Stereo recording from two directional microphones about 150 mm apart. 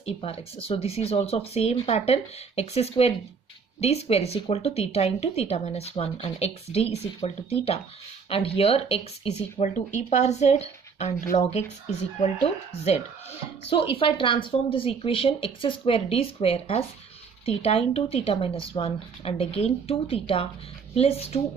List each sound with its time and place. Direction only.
0.0 s speech: 40° left (ahead or behind)
9.8 s speech: 55° left (ahead or behind)
13.7 s speech: 35° left (ahead or behind)